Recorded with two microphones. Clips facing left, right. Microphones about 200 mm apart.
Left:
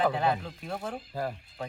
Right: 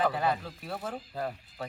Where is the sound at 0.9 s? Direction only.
10° left (ahead or behind).